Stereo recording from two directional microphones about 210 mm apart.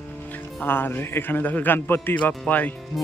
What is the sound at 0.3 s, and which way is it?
Speech, 10° left (ahead or behind).